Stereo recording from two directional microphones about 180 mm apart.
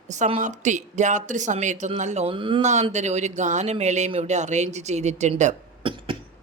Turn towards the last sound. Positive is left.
turn(degrees=-30)  # may be behind; listen again after turning